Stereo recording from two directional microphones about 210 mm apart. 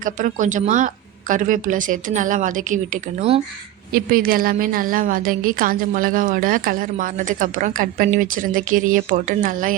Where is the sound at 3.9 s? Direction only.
45° right (ahead or behind).